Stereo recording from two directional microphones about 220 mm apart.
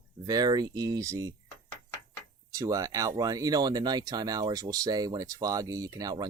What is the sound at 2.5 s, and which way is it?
Speech, 15° right (ahead or behind).